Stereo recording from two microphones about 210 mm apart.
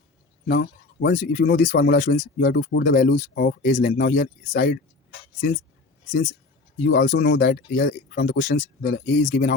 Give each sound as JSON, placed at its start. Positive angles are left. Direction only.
{"t": 0.4, "sound": "speech", "side_deg": 55}
{"t": 1.1, "sound": "speech", "side_deg": 40}
{"t": 3.7, "sound": "speech", "side_deg": 35}
{"t": 6.1, "sound": "speech", "side_deg": 40}